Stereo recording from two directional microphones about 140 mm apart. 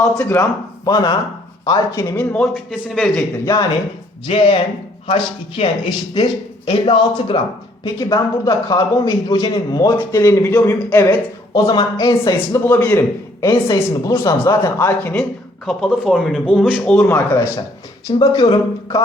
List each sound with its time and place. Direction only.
0.0 s a man's voice: 10° left (ahead or behind)
0.9 s a man's voice: 30° left (ahead or behind)
2.1 s speech: 5° left (ahead or behind)
3.4 s speech: 20° left (ahead or behind)
4.3 s a man's voice: 40° left (ahead or behind)
7.9 s speech: 25° left (ahead or behind)
15.2 s speech: centre (ahead or behind)
17.0 s a man's voice: 20° left (ahead or behind)